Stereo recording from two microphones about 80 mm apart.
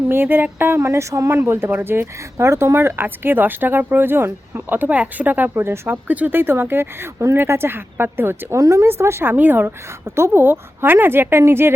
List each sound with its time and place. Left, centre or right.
0.1 s speech: right
6.1 s speech: right
8.5 s a woman's voice: right